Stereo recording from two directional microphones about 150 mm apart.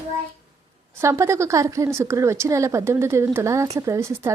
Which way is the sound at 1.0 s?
20° right (ahead or behind).